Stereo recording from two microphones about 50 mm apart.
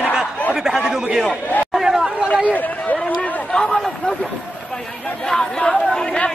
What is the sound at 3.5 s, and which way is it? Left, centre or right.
Speech, left.